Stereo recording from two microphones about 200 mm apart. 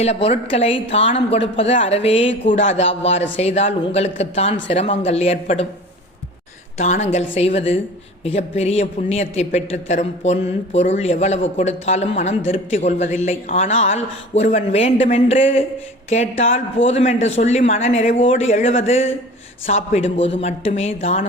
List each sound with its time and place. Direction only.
0.0 s speech: 30° left (ahead or behind)
6.7 s speech: 35° left (ahead or behind)